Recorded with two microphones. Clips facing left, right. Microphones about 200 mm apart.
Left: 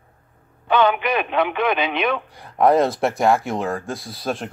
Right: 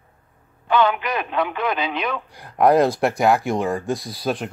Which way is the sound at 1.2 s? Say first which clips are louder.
Left 3 dB; 70° left (ahead or behind).